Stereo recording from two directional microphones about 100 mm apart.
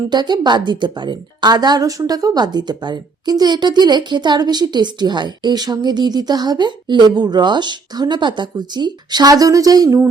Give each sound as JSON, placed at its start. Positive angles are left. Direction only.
{"t": 0.1, "sound": "a woman's voice", "side_deg": -45}